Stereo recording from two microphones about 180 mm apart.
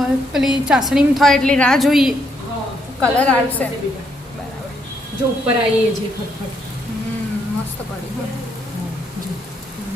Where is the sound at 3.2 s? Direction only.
5° left (ahead or behind).